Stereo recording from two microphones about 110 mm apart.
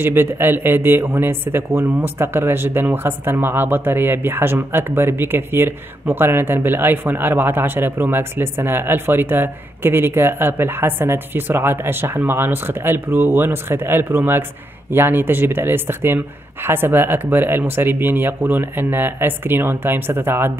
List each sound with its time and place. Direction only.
0.0 s speech: 20° right (ahead or behind)